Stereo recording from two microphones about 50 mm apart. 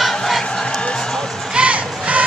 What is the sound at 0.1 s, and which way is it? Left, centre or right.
Crowd, centre.